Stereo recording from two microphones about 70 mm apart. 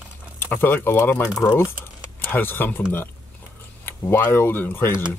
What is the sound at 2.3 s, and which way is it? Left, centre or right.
Speech, left.